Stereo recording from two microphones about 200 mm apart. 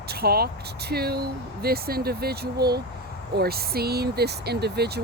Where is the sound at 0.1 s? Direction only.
50° right (ahead or behind).